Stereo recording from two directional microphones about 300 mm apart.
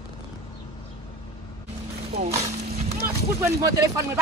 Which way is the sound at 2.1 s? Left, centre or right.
Right.